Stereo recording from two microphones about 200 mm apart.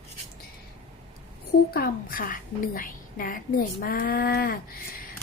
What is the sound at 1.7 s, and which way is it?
A woman's voice, 45° left (ahead or behind).